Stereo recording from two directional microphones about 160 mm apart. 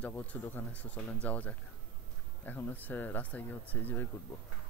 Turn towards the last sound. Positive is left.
turn(degrees=10)  # may be behind; listen again after turning